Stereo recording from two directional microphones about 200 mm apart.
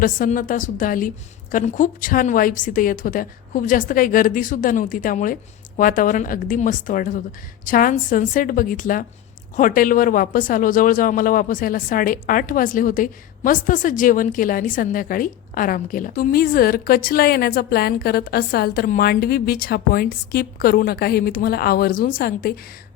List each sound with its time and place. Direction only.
0.0 s speech: 45° left (ahead or behind)